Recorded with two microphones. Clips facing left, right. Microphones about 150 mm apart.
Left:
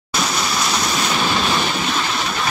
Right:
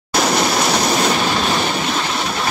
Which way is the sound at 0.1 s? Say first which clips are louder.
Right 6 dB; 55° right (ahead or behind).